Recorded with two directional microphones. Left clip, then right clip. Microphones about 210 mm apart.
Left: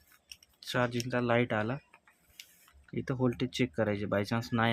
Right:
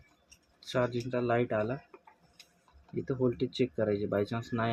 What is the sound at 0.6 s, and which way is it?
Speech, 45° left (ahead or behind).